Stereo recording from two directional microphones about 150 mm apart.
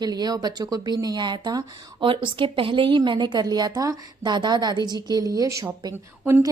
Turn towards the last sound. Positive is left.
turn(degrees=-20)  # may be behind; listen again after turning